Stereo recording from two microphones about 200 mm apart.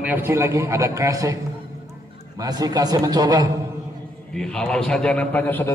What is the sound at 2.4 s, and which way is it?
A man's voice, 20° right (ahead or behind).